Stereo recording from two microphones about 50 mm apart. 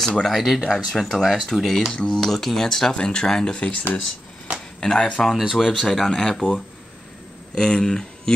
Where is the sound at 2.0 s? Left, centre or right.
Centre.